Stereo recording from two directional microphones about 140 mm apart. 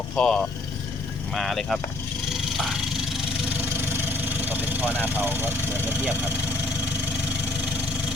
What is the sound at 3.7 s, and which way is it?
Speech, 15° right (ahead or behind).